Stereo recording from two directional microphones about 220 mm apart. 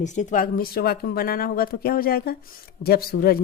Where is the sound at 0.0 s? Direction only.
35° left (ahead or behind).